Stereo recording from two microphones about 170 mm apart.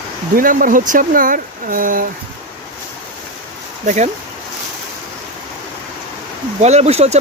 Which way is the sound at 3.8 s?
45° right (ahead or behind).